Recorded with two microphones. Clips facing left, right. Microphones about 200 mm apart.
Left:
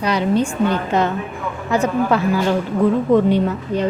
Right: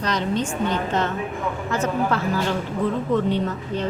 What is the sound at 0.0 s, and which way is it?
Speech, 10° left (ahead or behind).